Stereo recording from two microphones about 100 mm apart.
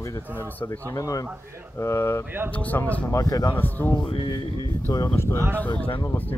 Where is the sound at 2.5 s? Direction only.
15° left (ahead or behind).